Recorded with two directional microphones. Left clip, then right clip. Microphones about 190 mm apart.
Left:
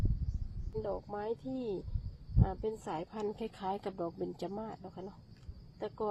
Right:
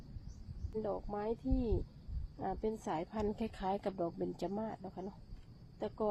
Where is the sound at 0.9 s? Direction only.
5° right (ahead or behind).